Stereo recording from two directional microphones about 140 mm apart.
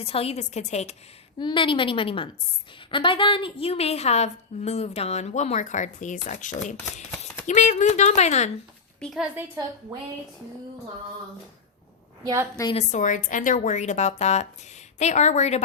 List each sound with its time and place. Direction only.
0.0 s a woman's voice: 45° left (ahead or behind)
1.4 s a woman's voice: 35° left (ahead or behind); by 8.4 s 55° left (ahead or behind)
9.0 s a woman's voice: centre (ahead or behind)
12.2 s a woman's voice: 25° right (ahead or behind)
12.7 s speech: 60° left (ahead or behind)